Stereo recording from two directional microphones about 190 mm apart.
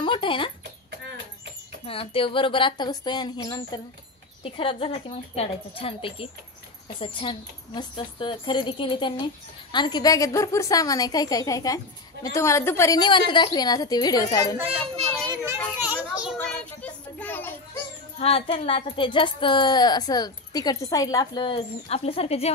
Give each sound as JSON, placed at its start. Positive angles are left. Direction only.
{"t": 0.0, "sound": "speech", "side_deg": 25}
{"t": 1.9, "sound": "speech", "side_deg": 30}
{"t": 15.4, "sound": "children playing", "side_deg": -10}
{"t": 16.3, "sound": "child singing", "side_deg": 10}
{"t": 18.2, "sound": "speech", "side_deg": 30}